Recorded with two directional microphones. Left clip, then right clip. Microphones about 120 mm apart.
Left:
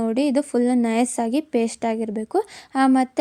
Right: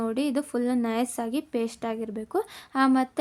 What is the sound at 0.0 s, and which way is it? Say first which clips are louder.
Speech: left 7 dB; 40° left (ahead or behind).